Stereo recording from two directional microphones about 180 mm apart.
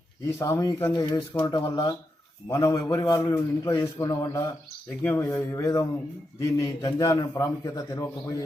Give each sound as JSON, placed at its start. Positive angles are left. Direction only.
{"t": 0.3, "sound": "a man's voice", "side_deg": 15}